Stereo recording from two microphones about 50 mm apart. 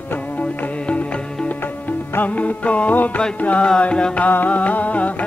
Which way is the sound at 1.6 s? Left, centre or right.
Left.